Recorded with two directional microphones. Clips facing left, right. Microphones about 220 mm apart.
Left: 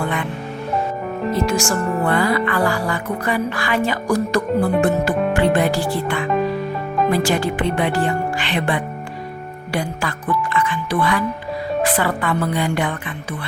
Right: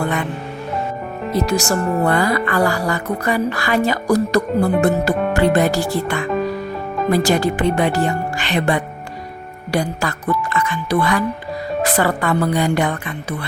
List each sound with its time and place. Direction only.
1.4 s a woman's voice: 40° right (ahead or behind)